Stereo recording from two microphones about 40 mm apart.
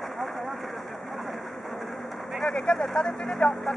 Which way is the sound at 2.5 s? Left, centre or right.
Left.